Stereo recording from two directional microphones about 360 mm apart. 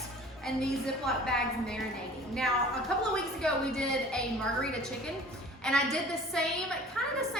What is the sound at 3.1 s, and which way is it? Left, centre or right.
A woman's voice, centre.